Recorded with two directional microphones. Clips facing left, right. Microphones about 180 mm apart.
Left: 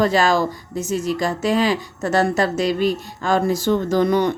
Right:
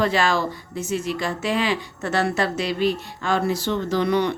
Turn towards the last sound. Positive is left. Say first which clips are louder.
# left 3 dB
turn(degrees=45)  # may be behind; listen again after turning